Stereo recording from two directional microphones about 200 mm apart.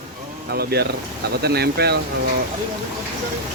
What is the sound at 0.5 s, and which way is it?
Speech, 55° right (ahead or behind).